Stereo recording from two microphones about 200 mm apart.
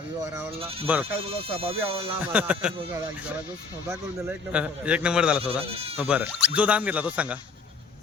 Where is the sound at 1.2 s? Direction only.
30° right (ahead or behind).